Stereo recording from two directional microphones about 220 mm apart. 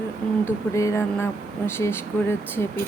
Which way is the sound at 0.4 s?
15° left (ahead or behind).